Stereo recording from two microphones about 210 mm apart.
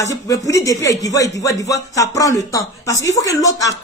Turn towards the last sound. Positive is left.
turn(degrees=15)  # may be behind; listen again after turning